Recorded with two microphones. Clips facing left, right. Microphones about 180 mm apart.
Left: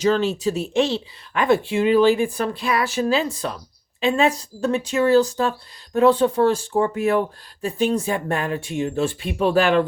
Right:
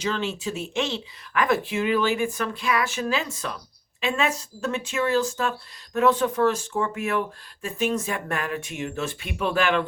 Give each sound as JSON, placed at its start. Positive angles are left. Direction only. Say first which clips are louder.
{"t": 0.0, "sound": "speech", "louder": "left 8 dB", "side_deg": 40}